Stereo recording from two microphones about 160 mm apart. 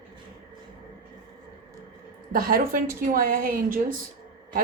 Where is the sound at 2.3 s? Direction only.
65° right (ahead or behind).